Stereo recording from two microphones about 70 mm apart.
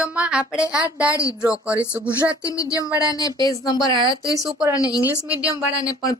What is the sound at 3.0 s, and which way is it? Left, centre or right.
A woman's voice, left.